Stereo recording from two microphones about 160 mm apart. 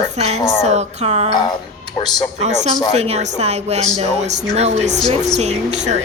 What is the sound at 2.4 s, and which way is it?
A woman's voice, 45° right (ahead or behind).